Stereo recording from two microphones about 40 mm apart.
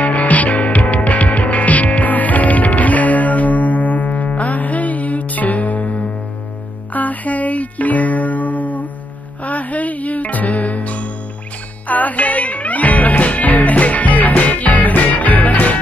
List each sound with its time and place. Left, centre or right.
0.0 s music: left